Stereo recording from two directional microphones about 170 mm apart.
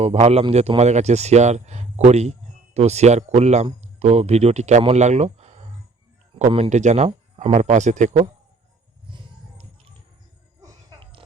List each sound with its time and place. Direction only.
0.0 s speech: 40° right (ahead or behind)
10.6 s music: 25° right (ahead or behind)